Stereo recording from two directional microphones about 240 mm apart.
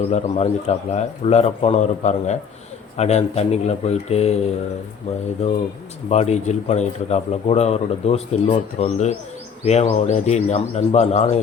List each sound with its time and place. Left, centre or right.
0.1 s a man's voice: left